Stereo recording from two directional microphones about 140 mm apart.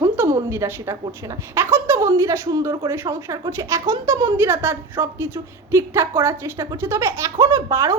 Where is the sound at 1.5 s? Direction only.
15° right (ahead or behind).